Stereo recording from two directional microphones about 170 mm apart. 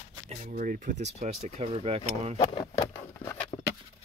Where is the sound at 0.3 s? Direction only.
50° right (ahead or behind).